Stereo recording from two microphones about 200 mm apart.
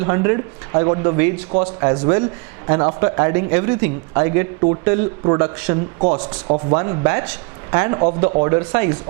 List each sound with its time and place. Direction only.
0.0 s speech: 20° right (ahead or behind)